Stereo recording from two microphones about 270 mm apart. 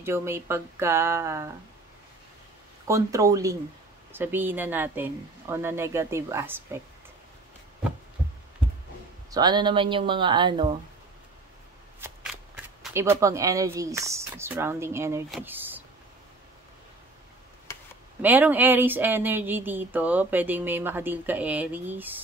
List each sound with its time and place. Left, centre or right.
0.0 s speech: centre
2.9 s speech: centre
9.3 s speech: centre
12.8 s speech: centre
18.2 s speech: centre